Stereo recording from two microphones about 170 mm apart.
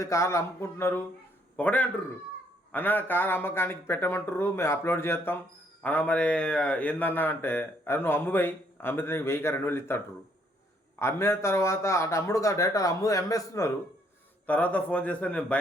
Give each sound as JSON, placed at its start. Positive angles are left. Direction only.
{"t": 0.0, "sound": "a man's voice", "side_deg": 15}
{"t": 11.0, "sound": "a man's voice", "side_deg": 15}